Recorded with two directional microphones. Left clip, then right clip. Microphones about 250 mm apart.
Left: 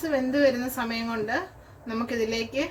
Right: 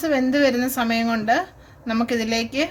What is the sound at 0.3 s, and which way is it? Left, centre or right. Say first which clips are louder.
A woman's voice: right 4 dB; right.